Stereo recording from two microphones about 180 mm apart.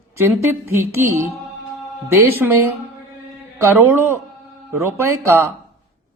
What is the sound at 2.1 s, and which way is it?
A man's voice, 10° right (ahead or behind).